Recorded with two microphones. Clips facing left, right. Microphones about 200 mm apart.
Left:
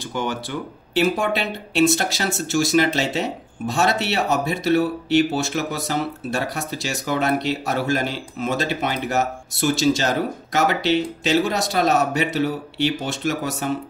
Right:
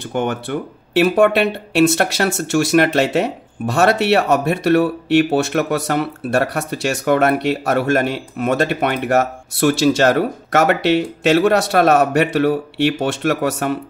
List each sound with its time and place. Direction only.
0.1 s speech: 55° right (ahead or behind)